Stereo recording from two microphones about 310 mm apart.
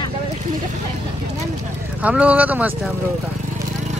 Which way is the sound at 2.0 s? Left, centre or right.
Centre.